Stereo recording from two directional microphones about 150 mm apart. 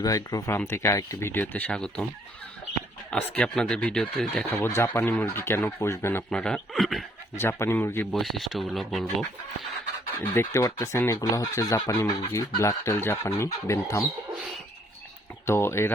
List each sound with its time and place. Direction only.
0.0 s speech: 25° left (ahead or behind); by 2.0 s 5° left (ahead or behind)
3.1 s speech: 10° left (ahead or behind)
7.3 s speech: 15° left (ahead or behind)
8.1 s speech: centre (ahead or behind)
10.2 s speech: 15° left (ahead or behind)
15.4 s speech: 15° left (ahead or behind)